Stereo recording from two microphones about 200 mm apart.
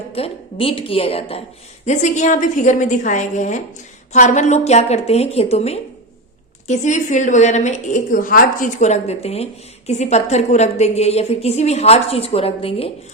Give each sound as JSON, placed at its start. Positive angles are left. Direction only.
{"t": 0.1, "sound": "a woman's voice", "side_deg": 30}